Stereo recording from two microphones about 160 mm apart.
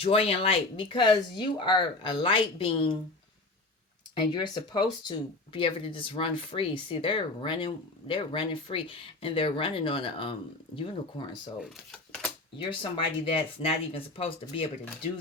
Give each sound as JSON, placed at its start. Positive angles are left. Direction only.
{"t": 0.0, "sound": "speech", "side_deg": 35}
{"t": 4.1, "sound": "speech", "side_deg": 30}
{"t": 11.6, "sound": "speech", "side_deg": 5}
{"t": 12.5, "sound": "speech", "side_deg": 30}